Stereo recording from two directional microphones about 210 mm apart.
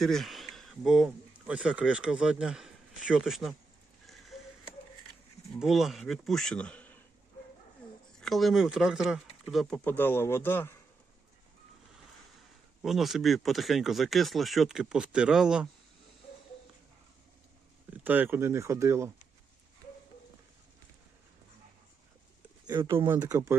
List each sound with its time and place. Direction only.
0.0 s speech: centre (ahead or behind)
4.0 s a sound: centre (ahead or behind)
5.5 s speech: centre (ahead or behind)
8.2 s speech: centre (ahead or behind)
12.8 s speech: centre (ahead or behind)
17.9 s speech: 10° right (ahead or behind)
22.6 s speech: 20° right (ahead or behind)
23.0 s speech: 10° right (ahead or behind)